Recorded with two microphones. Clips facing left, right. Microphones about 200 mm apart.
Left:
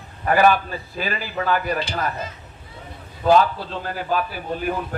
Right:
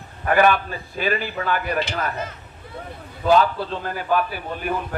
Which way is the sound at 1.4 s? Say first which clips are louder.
Left 5 dB; 40° left (ahead or behind).